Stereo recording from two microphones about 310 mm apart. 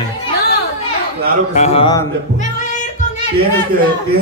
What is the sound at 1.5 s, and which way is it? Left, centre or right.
Speech, centre.